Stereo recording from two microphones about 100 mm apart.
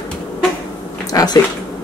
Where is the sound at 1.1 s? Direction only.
35° left (ahead or behind).